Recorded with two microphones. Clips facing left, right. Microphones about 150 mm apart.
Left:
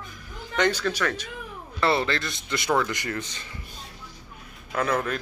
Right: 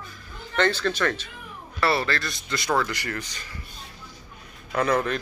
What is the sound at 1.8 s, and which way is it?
Speech, 20° left (ahead or behind).